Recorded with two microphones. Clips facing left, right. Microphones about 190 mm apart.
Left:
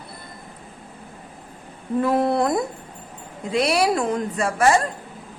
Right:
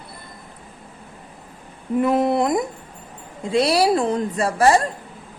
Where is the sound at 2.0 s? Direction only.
20° right (ahead or behind).